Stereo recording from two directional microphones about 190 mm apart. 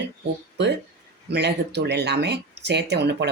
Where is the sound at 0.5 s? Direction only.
65° right (ahead or behind).